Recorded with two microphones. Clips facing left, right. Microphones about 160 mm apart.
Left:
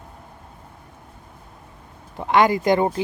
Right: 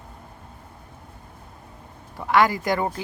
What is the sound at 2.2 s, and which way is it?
Speech, 20° left (ahead or behind).